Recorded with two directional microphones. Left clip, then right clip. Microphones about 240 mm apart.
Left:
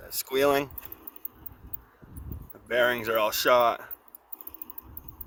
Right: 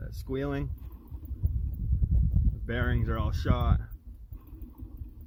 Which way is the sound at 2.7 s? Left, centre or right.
Left.